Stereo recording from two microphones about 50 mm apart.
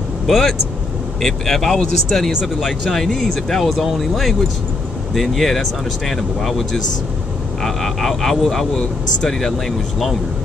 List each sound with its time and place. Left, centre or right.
0.3 s speech: centre